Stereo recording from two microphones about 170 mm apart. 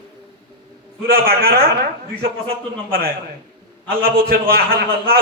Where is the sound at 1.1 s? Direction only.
65° right (ahead or behind).